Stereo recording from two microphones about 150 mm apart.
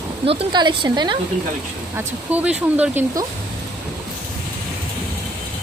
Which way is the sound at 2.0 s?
10° right (ahead or behind).